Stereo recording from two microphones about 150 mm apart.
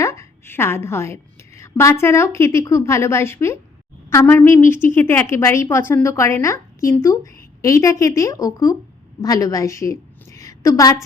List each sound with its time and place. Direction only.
0.0 s a woman's voice: 20° left (ahead or behind)